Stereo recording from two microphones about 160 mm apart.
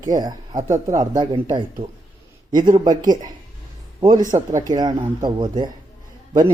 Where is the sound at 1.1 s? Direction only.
25° right (ahead or behind).